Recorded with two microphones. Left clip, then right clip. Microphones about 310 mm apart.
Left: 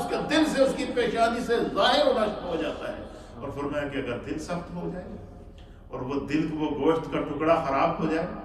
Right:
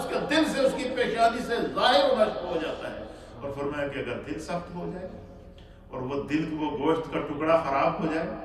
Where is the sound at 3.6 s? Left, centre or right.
Centre.